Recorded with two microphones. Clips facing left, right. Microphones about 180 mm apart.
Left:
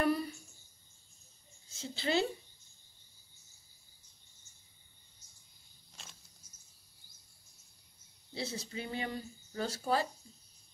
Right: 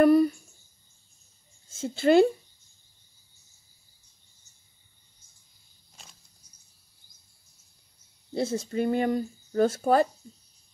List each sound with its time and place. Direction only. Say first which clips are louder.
0.0 s a sound: right 13 dB; 50° right (ahead or behind)
1.7 s a woman's voice: right 13 dB; 50° right (ahead or behind)
8.3 s speech: right 12 dB; 50° right (ahead or behind)